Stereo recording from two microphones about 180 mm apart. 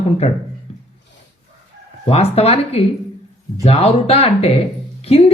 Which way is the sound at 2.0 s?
35° left (ahead or behind).